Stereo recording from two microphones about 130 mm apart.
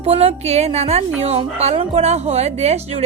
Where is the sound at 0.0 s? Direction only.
50° right (ahead or behind).